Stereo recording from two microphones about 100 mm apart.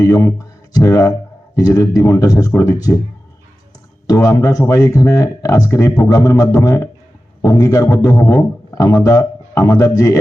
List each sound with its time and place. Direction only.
0.0 s speech: 35° left (ahead or behind)
4.0 s a man's voice: 35° left (ahead or behind)